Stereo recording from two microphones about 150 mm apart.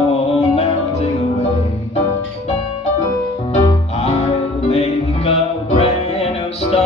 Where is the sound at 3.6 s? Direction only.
45° left (ahead or behind).